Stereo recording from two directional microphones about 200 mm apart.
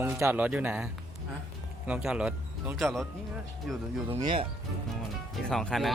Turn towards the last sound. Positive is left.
turn(degrees=0)  # may be behind; listen again after turning